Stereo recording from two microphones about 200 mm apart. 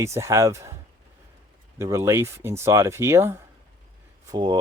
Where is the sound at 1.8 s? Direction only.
15° right (ahead or behind).